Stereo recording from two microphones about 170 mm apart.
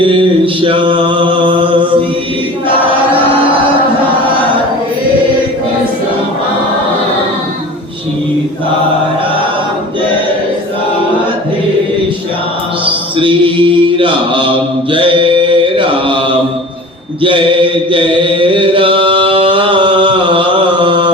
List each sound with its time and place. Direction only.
0.0 s mantra: 30° right (ahead or behind)
12.8 s mantra: 30° right (ahead or behind)
17.2 s chant: 30° right (ahead or behind)